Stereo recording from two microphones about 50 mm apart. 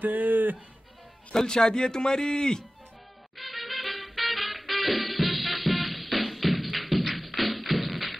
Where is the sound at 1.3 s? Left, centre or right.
Centre.